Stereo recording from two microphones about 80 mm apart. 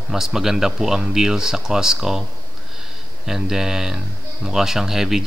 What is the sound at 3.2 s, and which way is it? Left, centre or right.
Speech, centre.